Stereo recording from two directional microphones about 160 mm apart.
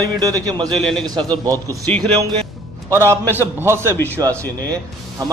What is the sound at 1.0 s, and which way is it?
Speech, 25° right (ahead or behind).